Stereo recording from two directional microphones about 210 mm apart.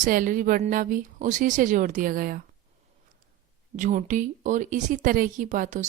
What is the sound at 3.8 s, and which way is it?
Speech, 35° right (ahead or behind).